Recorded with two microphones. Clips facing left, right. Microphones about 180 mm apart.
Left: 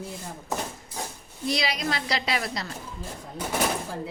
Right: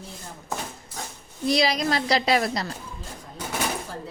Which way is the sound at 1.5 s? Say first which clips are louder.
Right 6 dB; 35° right (ahead or behind).